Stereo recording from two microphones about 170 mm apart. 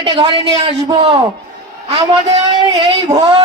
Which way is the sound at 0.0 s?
30° right (ahead or behind).